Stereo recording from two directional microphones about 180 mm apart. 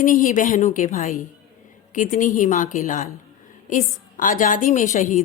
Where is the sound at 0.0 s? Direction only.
45° left (ahead or behind).